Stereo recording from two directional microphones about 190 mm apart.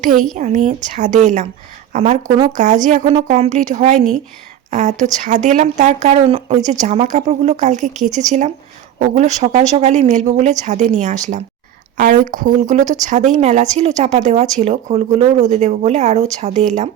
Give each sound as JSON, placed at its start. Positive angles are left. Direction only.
{"t": 0.0, "sound": "speech", "side_deg": -45}